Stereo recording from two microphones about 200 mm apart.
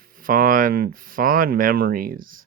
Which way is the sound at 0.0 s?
45° right (ahead or behind).